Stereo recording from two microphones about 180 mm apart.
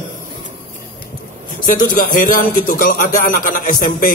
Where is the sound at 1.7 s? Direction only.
50° left (ahead or behind).